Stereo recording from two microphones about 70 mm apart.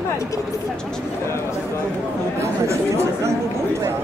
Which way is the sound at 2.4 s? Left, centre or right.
Right.